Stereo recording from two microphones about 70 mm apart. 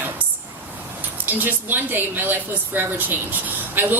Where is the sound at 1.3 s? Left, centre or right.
Right.